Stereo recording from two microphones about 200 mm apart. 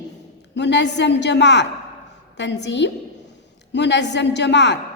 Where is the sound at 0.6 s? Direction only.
60° left (ahead or behind).